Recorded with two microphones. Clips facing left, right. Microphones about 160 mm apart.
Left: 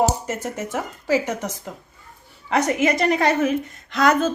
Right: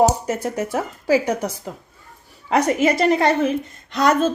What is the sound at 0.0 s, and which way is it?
A woman's voice, 10° right (ahead or behind).